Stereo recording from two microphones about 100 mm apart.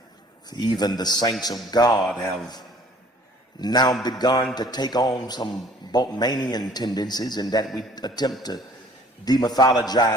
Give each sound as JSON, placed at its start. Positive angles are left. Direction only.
{"t": 0.5, "sound": "a man's voice", "side_deg": 45}
{"t": 2.0, "sound": "speech", "side_deg": 5}
{"t": 3.6, "sound": "a man's voice", "side_deg": 45}